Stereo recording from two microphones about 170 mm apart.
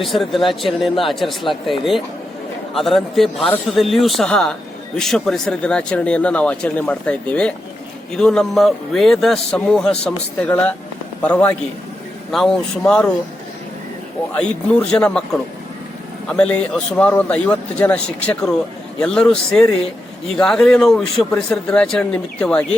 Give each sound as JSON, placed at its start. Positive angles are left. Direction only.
{"t": 0.0, "sound": "speech", "side_deg": 0}
{"t": 2.7, "sound": "a man's voice", "side_deg": 0}
{"t": 14.3, "sound": "speech", "side_deg": 5}
{"t": 16.4, "sound": "speech", "side_deg": 5}